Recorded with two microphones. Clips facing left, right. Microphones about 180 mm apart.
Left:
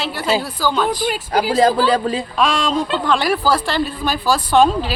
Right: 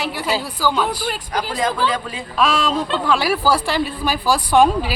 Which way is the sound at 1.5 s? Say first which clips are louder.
Left 7 dB; 35° left (ahead or behind).